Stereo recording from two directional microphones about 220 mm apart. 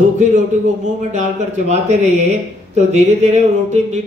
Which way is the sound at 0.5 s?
30° right (ahead or behind).